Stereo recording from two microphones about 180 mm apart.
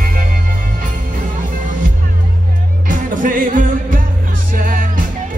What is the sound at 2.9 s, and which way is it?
Music, 50° right (ahead or behind).